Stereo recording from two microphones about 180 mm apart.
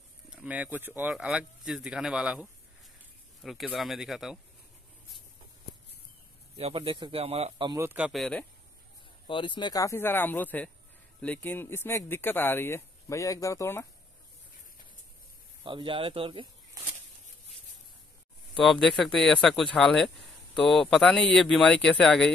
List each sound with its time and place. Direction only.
0.3 s speech: 5° right (ahead or behind)
6.6 s speech: 30° right (ahead or behind)
7.7 s speech: 10° right (ahead or behind); by 8.5 s 5° left (ahead or behind)
9.3 s speech: 25° left (ahead or behind)
15.6 s speech: 25° right (ahead or behind)
18.5 s speech: centre (ahead or behind)